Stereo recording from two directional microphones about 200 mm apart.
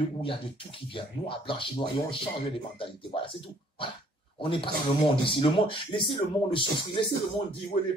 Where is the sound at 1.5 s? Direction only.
25° left (ahead or behind).